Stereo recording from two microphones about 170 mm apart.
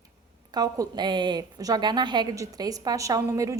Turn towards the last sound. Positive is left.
turn(degrees=-20)  # may be behind; listen again after turning